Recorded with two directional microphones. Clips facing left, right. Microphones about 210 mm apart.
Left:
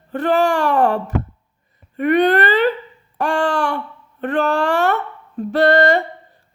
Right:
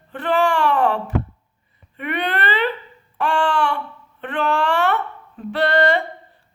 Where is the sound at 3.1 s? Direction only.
40° left (ahead or behind).